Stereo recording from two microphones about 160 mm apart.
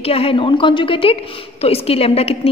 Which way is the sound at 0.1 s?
35° left (ahead or behind).